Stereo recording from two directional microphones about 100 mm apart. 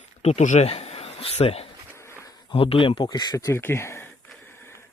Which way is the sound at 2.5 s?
65° left (ahead or behind).